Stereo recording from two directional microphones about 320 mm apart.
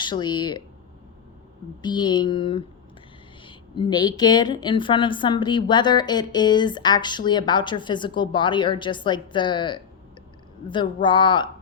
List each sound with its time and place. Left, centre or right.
0.0 s speech: centre
1.8 s speech: centre